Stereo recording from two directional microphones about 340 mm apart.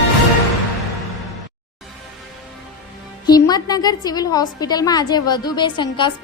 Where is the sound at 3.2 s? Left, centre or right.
Centre.